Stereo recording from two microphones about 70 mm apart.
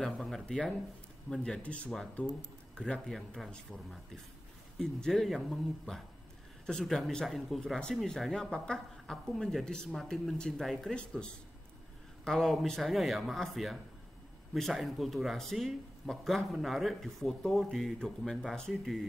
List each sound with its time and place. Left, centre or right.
0.0 s speech: centre
12.3 s speech: centre